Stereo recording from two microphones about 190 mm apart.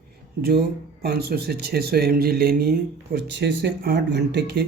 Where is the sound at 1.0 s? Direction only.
55° right (ahead or behind).